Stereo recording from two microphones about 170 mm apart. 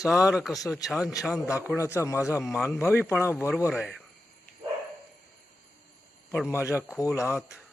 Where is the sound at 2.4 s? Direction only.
Centre (ahead or behind).